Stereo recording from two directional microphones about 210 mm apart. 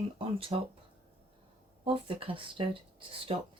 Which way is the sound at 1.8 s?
25° right (ahead or behind).